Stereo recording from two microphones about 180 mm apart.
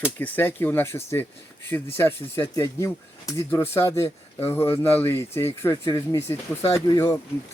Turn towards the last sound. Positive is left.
turn(degrees=20)  # may be behind; listen again after turning